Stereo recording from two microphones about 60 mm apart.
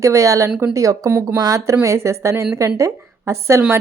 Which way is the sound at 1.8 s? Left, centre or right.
Right.